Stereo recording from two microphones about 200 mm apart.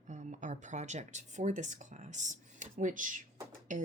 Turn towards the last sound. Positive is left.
turn(degrees=-40)  # may be behind; listen again after turning